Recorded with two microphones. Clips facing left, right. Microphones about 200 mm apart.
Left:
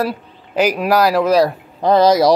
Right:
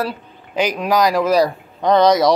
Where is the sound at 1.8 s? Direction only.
30° left (ahead or behind).